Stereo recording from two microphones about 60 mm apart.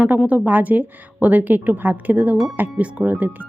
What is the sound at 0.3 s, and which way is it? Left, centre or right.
A woman's voice, right.